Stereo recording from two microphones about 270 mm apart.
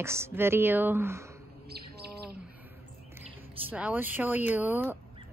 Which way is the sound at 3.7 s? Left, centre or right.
Centre.